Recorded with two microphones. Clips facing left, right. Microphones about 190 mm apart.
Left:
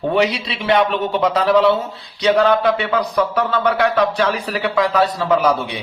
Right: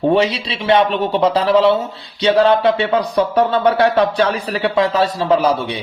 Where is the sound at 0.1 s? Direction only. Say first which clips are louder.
Right 2 dB; 25° right (ahead or behind).